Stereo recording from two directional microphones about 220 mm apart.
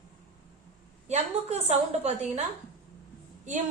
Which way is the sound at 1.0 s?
30° right (ahead or behind).